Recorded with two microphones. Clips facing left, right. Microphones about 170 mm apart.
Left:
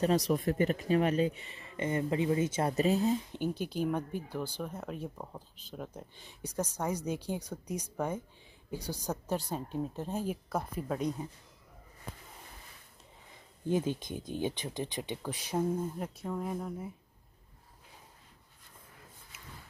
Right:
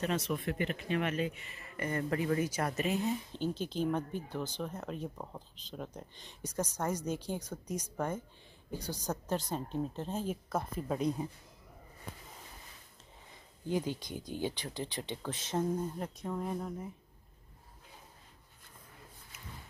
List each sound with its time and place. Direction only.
0.0 s speech: 35° left (ahead or behind)
3.1 s speech: 15° left (ahead or behind)
13.7 s speech: 20° left (ahead or behind)